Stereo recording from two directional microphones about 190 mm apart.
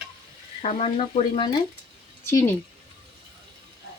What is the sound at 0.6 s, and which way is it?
Speech, 30° left (ahead or behind).